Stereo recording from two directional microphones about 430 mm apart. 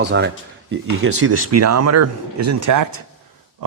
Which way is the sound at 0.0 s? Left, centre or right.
Right.